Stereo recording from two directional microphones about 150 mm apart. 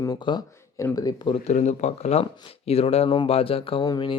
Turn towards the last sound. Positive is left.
turn(degrees=30)  # may be behind; listen again after turning